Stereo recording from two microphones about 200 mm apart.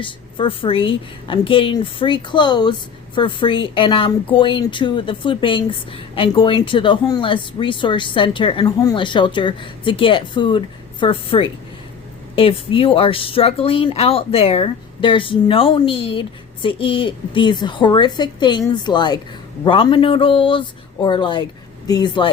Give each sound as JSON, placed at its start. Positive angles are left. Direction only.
{"t": 0.0, "sound": "speech", "side_deg": 25}